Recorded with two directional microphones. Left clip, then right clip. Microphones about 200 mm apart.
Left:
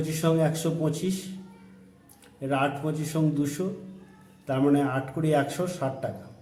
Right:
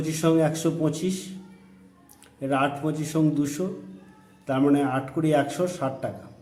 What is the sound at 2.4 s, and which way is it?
A man's voice, 10° right (ahead or behind).